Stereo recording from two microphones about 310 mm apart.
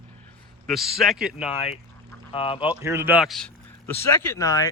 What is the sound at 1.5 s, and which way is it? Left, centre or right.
Speech, centre.